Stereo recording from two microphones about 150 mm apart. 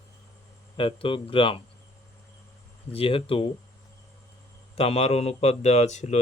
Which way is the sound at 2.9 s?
40° left (ahead or behind).